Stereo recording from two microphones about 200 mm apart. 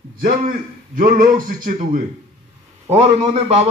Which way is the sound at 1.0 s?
45° right (ahead or behind).